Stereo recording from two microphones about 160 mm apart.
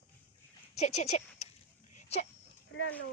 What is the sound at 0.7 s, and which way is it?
Speech, 45° left (ahead or behind).